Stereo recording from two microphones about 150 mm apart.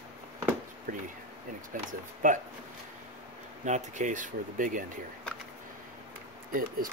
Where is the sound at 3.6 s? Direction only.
55° right (ahead or behind).